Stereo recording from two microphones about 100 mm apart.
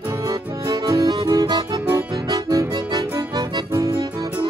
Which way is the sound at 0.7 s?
35° right (ahead or behind).